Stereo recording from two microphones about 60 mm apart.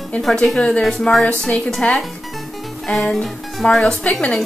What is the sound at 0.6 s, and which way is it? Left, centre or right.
Speech, centre.